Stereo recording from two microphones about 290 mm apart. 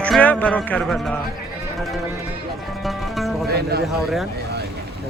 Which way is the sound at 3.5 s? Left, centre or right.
Right.